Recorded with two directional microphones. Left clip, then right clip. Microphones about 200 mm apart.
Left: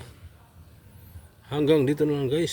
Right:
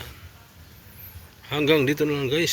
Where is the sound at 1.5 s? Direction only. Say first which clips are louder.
Right 1 dB; 25° left (ahead or behind).